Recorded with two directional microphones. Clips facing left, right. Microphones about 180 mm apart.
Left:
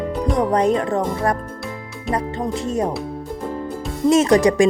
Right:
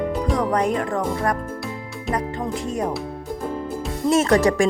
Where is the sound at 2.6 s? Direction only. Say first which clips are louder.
Left 4 dB; 25° left (ahead or behind).